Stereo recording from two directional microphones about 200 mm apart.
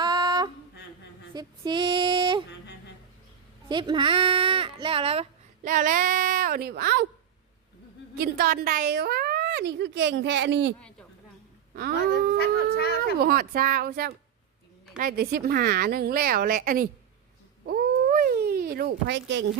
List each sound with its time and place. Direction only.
0.0 s a sound: 20° right (ahead or behind)
1.3 s female singing: 20° right (ahead or behind)
3.7 s speech: 25° right (ahead or behind)
5.6 s a woman's voice: 40° right (ahead or behind)
8.2 s a woman's voice: 50° right (ahead or behind)
10.8 s a woman's voice: 5° left (ahead or behind)
11.7 s a sound: 50° right (ahead or behind)
13.1 s a woman's voice: 50° right (ahead or behind)
17.7 s a sound: 45° right (ahead or behind); by 19.5 s 65° right (ahead or behind)